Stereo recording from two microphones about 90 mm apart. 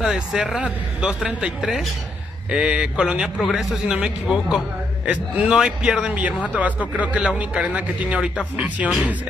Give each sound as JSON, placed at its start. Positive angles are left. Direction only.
{"t": 0.0, "sound": "a man's voice", "side_deg": -5}